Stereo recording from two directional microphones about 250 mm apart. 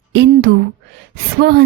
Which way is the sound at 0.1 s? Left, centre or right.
Right.